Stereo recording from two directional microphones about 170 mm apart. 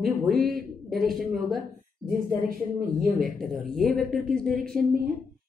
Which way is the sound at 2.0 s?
60° right (ahead or behind).